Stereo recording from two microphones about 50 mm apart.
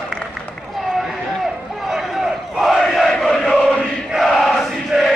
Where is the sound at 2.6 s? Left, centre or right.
Centre.